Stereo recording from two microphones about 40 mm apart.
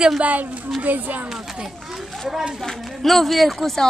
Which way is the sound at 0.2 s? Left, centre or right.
Right.